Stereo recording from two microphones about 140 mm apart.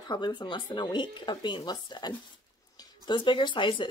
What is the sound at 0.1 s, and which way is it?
Speech, 35° left (ahead or behind).